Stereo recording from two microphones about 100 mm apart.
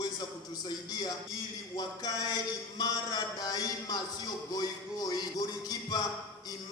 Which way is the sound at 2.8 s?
40° left (ahead or behind).